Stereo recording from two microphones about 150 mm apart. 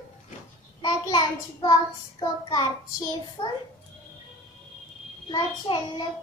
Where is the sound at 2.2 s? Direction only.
25° left (ahead or behind).